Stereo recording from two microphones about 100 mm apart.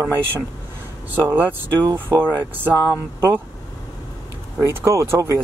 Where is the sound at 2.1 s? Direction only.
5° left (ahead or behind).